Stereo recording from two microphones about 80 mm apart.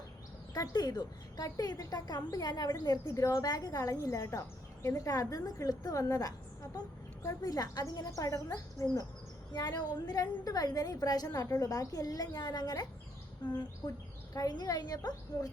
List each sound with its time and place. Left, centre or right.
0.5 s a woman's voice: left
3.0 s speech: left
3.4 s a woman's voice: left
11.4 s a woman's voice: left